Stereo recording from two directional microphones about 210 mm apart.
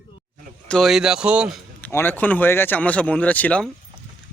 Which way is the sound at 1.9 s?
10° left (ahead or behind).